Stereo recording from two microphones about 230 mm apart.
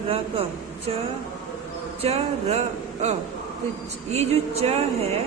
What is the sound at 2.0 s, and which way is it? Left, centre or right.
Speech, right.